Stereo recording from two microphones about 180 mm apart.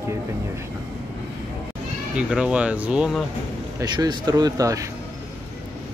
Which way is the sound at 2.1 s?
5° right (ahead or behind).